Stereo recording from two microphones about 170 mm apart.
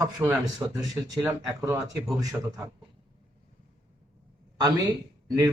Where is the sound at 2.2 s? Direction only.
15° right (ahead or behind).